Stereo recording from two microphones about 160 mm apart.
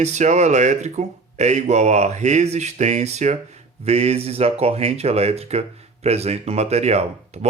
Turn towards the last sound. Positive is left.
turn(degrees=-40)  # may be behind; listen again after turning